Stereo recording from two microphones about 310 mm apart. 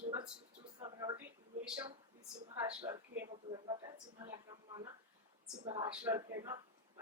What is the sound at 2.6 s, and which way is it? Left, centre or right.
Speech, centre.